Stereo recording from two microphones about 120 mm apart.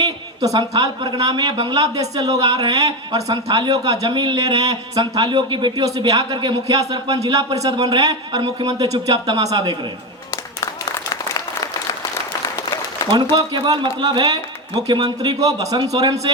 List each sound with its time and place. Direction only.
0.0 s a woman's voice: 30° right (ahead or behind)
11.1 s applause: 30° left (ahead or behind)
14.0 s a woman's voice: 40° right (ahead or behind)